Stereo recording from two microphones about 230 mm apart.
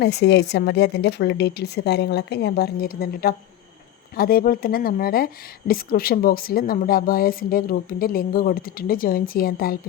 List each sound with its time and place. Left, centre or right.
0.0 s a woman's voice: left